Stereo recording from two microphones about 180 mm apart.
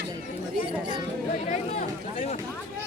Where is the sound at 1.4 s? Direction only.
45° left (ahead or behind).